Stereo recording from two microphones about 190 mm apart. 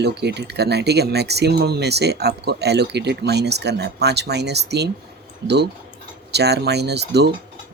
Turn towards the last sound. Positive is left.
turn(degrees=-60)  # may be behind; listen again after turning